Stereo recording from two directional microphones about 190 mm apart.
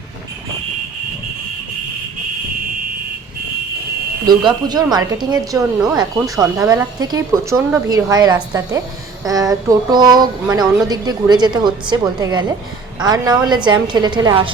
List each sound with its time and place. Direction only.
4.3 s speech: 20° right (ahead or behind)